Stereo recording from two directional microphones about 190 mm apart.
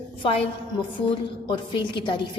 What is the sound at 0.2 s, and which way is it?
A woman's voice, 30° left (ahead or behind).